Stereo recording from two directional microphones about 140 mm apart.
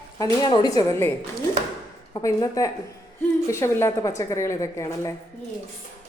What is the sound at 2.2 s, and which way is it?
A woman's voice, 25° left (ahead or behind).